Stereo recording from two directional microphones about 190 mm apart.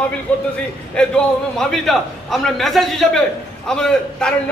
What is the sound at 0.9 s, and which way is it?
A man's voice, 5° left (ahead or behind).